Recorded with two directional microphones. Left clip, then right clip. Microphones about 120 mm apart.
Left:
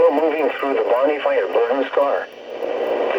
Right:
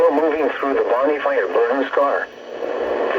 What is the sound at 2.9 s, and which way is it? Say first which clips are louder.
Radio: even; 20° left (ahead or behind).